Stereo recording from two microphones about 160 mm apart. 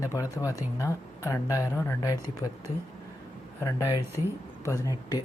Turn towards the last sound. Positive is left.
turn(degrees=20)  # may be behind; listen again after turning